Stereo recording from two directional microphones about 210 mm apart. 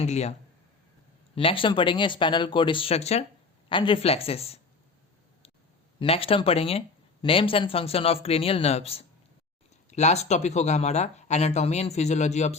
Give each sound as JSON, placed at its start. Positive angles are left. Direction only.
{"t": 0.0, "sound": "speech", "side_deg": 30}
{"t": 1.4, "sound": "speech", "side_deg": 25}
{"t": 6.0, "sound": "speech", "side_deg": 25}